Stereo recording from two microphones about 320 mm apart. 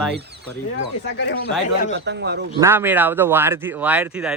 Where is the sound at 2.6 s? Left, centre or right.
Centre.